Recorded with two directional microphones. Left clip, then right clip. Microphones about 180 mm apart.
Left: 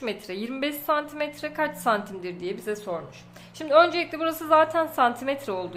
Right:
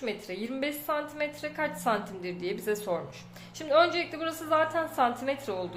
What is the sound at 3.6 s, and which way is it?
A woman's voice, 25° left (ahead or behind).